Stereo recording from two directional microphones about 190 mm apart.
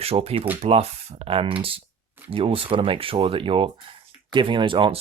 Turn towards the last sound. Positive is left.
turn(degrees=-25)  # may be behind; listen again after turning